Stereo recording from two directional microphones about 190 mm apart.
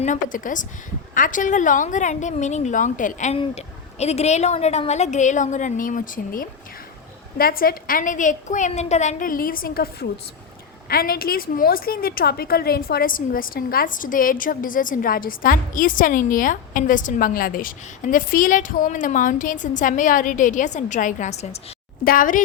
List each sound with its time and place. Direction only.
0.0 s a woman's voice: 45° left (ahead or behind)
22.0 s a woman's voice: 50° left (ahead or behind)